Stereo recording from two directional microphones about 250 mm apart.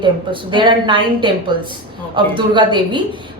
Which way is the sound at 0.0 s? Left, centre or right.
Centre.